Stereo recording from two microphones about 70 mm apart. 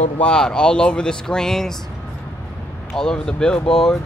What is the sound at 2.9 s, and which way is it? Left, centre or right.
Speech, centre.